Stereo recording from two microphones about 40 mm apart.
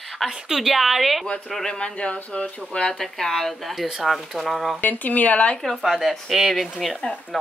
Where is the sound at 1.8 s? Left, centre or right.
Left.